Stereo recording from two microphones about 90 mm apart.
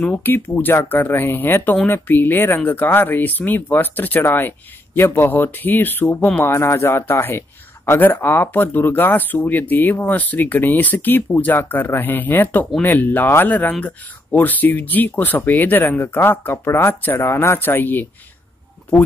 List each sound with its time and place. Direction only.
0.0 s a man's voice: 20° left (ahead or behind)